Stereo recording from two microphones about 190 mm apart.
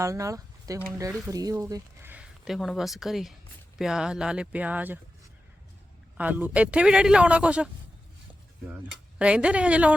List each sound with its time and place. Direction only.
0.0 s speech: 15° right (ahead or behind)
6.1 s a man's voice: 10° right (ahead or behind)